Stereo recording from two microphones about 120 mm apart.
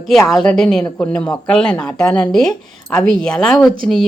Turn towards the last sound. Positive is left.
turn(degrees=0)  # may be behind; listen again after turning